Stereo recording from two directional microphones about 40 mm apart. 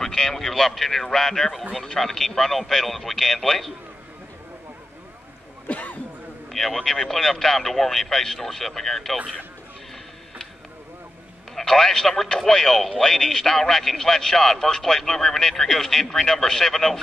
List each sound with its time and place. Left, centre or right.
0.0 s a man's voice: centre
5.7 s speech: left
6.5 s a man's voice: centre
11.5 s a man's voice: centre